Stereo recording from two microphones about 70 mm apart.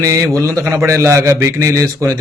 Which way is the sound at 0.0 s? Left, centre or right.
Right.